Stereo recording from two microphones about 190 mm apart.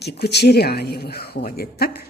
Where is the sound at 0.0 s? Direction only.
60° left (ahead or behind).